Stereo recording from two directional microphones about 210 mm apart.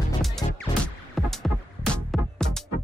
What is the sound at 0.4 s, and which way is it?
Music, 20° left (ahead or behind).